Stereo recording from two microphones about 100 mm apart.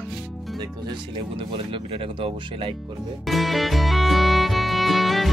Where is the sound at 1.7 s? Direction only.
65° right (ahead or behind).